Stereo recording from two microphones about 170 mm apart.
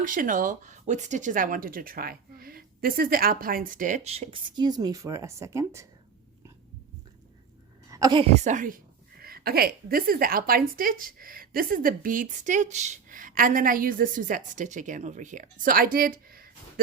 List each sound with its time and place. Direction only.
0.0 s speech: 50° right (ahead or behind); by 5.9 s 15° right (ahead or behind)
7.9 s a sound: 20° right (ahead or behind)
8.2 s a woman's voice: 40° right (ahead or behind); by 16.8 s 60° right (ahead or behind)